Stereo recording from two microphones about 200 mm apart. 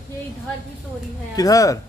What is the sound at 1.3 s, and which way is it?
Speech, 15° left (ahead or behind).